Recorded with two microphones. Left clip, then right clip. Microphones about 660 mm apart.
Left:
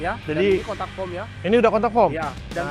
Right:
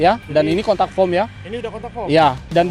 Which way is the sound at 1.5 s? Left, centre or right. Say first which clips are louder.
Left 10 dB; left.